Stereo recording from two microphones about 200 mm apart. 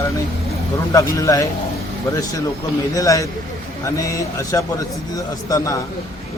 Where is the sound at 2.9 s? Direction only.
15° left (ahead or behind).